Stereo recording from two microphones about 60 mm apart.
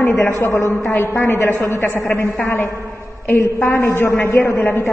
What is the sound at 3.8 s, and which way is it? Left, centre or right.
A woman's voice, left.